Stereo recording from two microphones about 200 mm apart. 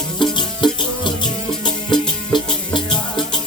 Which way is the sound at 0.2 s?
25° left (ahead or behind).